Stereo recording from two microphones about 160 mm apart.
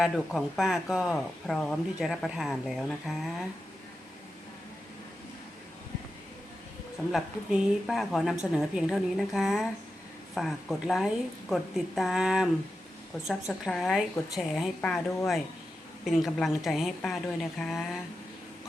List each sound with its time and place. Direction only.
0.0 s speech: centre (ahead or behind)
7.1 s speech: centre (ahead or behind)